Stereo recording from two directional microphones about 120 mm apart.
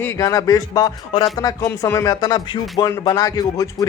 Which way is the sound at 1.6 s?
25° left (ahead or behind).